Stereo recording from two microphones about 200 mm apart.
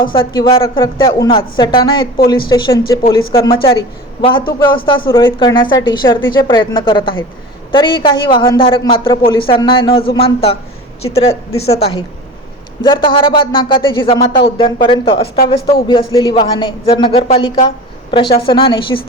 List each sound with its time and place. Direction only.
0.0 s a woman's voice: 25° left (ahead or behind)
12.8 s a woman's voice: 25° left (ahead or behind)